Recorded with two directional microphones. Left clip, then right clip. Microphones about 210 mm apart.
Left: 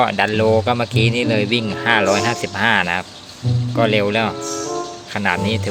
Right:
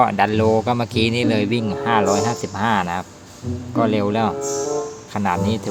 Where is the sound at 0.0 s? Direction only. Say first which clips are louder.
Even; centre (ahead or behind).